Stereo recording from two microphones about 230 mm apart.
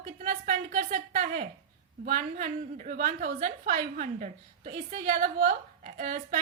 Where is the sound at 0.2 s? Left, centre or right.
Right.